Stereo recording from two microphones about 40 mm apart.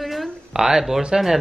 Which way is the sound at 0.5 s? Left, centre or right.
Centre.